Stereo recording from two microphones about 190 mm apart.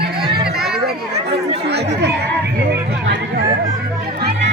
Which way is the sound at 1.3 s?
60° right (ahead or behind).